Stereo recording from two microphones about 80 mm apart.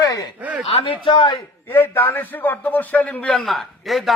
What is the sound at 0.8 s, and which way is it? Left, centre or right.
Speech, left.